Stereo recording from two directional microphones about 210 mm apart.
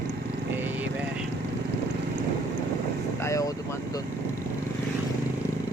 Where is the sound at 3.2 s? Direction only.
15° left (ahead or behind).